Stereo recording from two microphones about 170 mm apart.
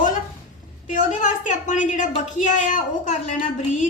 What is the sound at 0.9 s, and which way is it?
A woman's voice, 45° left (ahead or behind).